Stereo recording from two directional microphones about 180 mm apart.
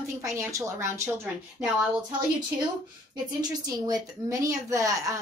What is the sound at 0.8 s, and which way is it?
Speech, 15° right (ahead or behind).